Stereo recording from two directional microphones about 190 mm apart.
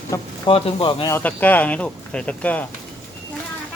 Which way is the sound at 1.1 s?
10° left (ahead or behind).